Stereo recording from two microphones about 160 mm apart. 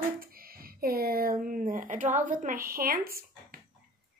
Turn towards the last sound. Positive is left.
turn(degrees=-65)  # may be behind; listen again after turning